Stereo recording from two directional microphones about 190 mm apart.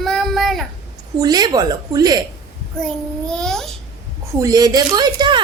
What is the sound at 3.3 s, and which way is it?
Speech, 5° left (ahead or behind).